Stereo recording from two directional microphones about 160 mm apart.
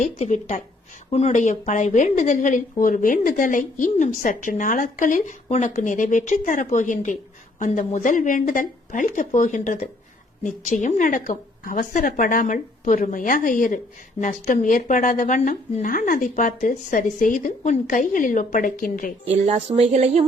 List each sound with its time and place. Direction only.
0.0 s a woman's voice: 45° left (ahead or behind)
19.2 s speech: 45° right (ahead or behind)